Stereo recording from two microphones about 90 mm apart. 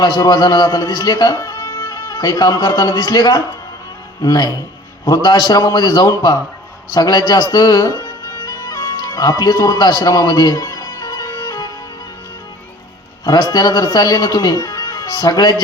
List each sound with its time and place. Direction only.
0.0 s speech: 45° left (ahead or behind)
8.4 s music: 40° left (ahead or behind)
13.2 s speech: 45° left (ahead or behind)